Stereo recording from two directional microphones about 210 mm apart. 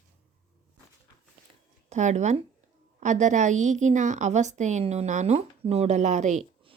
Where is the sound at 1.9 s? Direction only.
35° right (ahead or behind).